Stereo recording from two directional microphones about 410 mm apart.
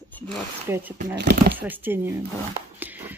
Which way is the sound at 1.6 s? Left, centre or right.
Centre.